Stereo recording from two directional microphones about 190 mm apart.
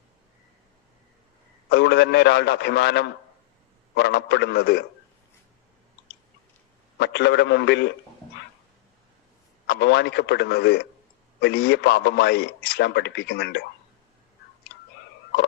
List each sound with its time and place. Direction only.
1.7 s a man's voice: 60° left (ahead or behind)
7.0 s a man's voice: 60° left (ahead or behind)
9.6 s a man's voice: 60° left (ahead or behind)